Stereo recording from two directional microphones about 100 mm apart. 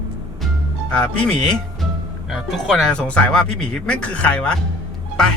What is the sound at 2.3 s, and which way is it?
Speech, centre (ahead or behind).